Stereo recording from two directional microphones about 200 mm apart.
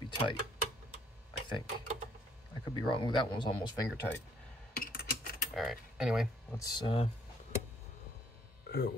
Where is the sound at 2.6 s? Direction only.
25° left (ahead or behind).